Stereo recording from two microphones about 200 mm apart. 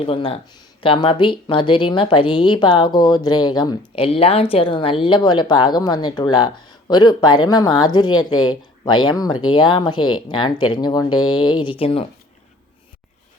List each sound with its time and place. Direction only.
0.0 s speech: 30° left (ahead or behind)